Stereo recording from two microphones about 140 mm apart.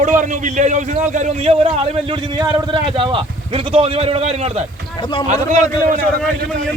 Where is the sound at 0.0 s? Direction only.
60° right (ahead or behind).